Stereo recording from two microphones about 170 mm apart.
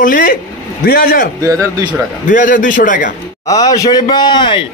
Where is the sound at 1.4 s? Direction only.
20° right (ahead or behind).